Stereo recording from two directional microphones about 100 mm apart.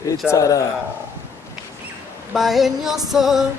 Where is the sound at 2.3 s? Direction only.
Centre (ahead or behind).